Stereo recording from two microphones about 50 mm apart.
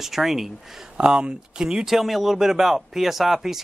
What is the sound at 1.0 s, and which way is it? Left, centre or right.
Speech, centre.